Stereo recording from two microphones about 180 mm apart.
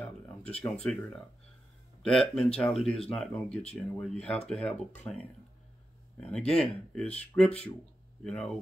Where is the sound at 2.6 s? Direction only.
Centre (ahead or behind).